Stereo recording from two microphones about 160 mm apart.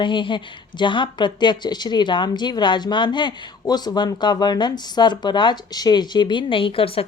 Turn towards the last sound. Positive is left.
turn(degrees=35)  # may be behind; listen again after turning